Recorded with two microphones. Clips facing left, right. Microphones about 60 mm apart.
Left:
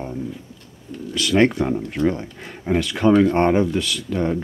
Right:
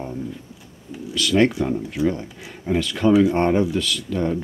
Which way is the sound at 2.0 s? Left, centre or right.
Centre.